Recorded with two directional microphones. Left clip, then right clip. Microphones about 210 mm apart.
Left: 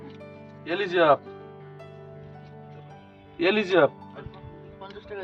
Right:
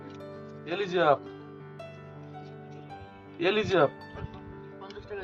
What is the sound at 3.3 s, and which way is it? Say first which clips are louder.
Speech: left 4 dB; 30° left (ahead or behind).